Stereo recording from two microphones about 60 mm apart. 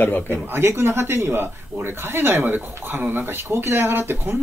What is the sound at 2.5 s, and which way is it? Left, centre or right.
A man's voice, right.